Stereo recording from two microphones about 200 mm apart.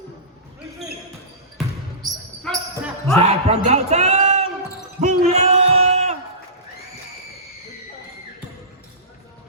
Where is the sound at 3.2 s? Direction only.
35° right (ahead or behind).